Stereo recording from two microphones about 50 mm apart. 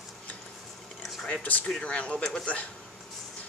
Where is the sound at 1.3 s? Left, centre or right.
Left.